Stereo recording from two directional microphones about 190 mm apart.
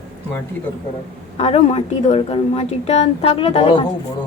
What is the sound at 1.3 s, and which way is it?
A woman's voice, 35° left (ahead or behind).